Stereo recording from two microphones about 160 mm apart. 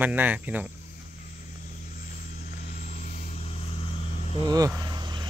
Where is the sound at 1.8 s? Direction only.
55° left (ahead or behind).